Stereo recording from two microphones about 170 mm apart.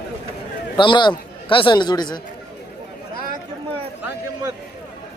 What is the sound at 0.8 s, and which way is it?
A man's voice, 25° left (ahead or behind).